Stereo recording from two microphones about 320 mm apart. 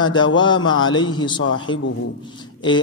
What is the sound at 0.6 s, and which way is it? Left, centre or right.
Speech, left.